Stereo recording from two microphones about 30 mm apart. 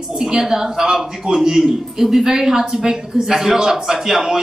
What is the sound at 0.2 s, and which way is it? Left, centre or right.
A man's voice, centre.